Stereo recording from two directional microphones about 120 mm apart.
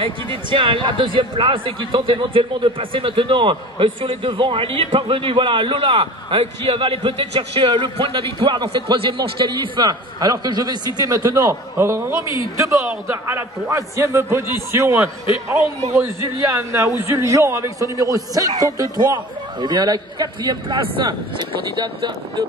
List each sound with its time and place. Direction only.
0.0 s a man's voice: 45° right (ahead or behind)